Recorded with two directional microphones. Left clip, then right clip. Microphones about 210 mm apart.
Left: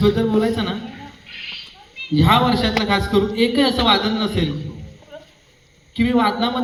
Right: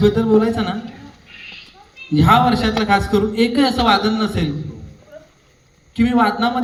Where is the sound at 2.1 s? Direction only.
55° right (ahead or behind).